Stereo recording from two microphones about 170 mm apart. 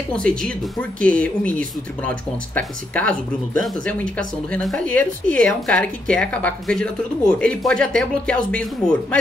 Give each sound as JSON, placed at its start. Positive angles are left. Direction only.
{"t": 0.1, "sound": "a woman's voice", "side_deg": 5}